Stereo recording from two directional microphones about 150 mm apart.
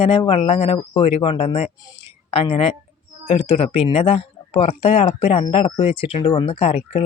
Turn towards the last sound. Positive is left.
turn(degrees=40)  # may be behind; listen again after turning